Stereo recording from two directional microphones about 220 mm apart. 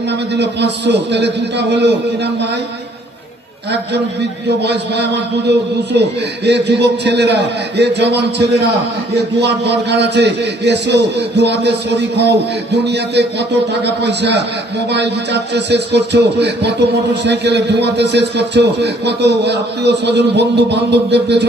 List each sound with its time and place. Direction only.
0.3 s music: 50° right (ahead or behind)
5.9 s music: 50° right (ahead or behind)